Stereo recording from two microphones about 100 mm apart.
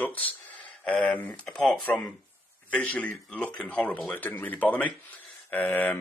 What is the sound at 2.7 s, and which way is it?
Speech, 15° left (ahead or behind).